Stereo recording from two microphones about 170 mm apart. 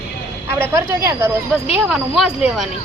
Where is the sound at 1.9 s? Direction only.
Centre (ahead or behind).